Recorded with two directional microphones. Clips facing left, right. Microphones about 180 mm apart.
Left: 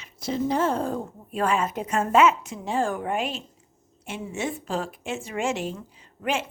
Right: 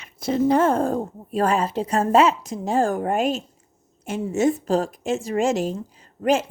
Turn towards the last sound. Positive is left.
turn(degrees=-40)  # may be behind; listen again after turning